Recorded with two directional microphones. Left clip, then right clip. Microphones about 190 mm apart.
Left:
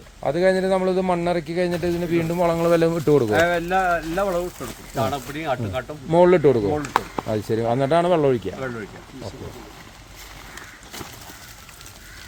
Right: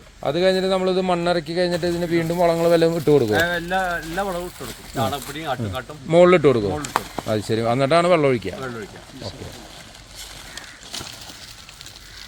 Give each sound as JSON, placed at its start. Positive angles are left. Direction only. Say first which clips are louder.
{"t": 0.2, "sound": "a man's voice", "louder": "even", "side_deg": -45}
{"t": 3.3, "sound": "speech", "louder": "left 1 dB", "side_deg": 35}
{"t": 4.9, "sound": "speech", "louder": "even", "side_deg": 15}
{"t": 6.1, "sound": "a man's voice", "louder": "right 2 dB", "side_deg": -45}